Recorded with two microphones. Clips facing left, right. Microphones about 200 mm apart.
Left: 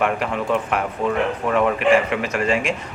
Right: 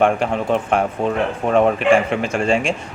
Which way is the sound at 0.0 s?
30° right (ahead or behind).